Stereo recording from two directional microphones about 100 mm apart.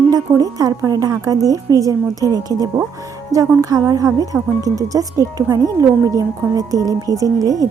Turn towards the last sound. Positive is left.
turn(degrees=-35)  # may be behind; listen again after turning